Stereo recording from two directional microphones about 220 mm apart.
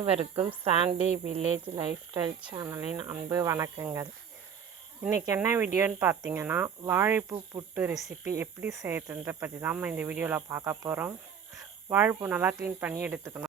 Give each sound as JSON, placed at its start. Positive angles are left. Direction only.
{"t": 0.0, "sound": "a woman's voice", "side_deg": -25}